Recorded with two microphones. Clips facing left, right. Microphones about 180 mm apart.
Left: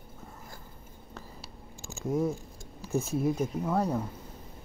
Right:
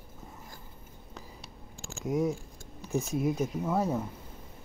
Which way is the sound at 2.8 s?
Centre (ahead or behind).